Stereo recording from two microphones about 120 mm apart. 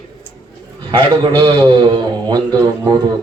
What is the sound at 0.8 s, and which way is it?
A man's voice, 40° right (ahead or behind).